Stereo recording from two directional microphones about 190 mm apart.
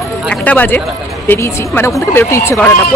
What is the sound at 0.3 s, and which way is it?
Speech, 5° left (ahead or behind).